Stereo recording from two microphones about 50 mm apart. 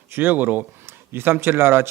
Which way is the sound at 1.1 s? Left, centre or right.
Right.